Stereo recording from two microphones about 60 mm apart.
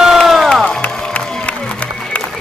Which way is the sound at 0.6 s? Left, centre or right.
Left.